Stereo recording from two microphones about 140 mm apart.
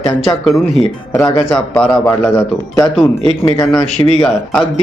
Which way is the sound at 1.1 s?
20° left (ahead or behind).